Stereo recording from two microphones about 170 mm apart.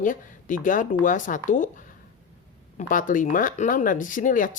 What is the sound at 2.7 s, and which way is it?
Speech, 50° left (ahead or behind).